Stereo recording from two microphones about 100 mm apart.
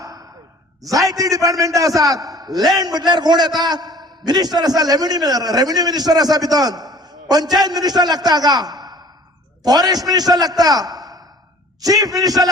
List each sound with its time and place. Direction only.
0.0 s sigh: 35° right (ahead or behind)
0.8 s a man's voice: 35° right (ahead or behind)